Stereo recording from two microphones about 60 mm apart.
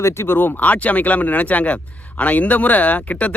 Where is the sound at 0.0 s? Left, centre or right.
Left.